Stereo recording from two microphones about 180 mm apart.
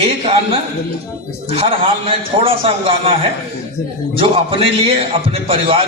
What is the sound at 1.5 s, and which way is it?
A man's voice, 30° right (ahead or behind).